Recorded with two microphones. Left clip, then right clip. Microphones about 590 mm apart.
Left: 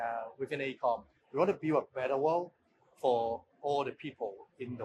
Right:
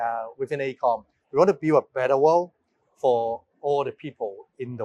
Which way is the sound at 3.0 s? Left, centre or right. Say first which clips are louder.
Right 8 dB; right.